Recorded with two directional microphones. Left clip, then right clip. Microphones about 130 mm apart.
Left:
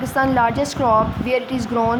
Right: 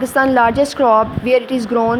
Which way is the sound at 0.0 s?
35° right (ahead or behind).